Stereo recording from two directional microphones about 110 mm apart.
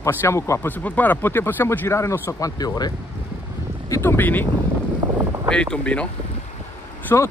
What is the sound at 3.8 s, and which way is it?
Speech, 25° left (ahead or behind).